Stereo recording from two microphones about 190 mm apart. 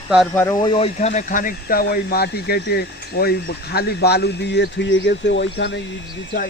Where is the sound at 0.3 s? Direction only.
20° left (ahead or behind).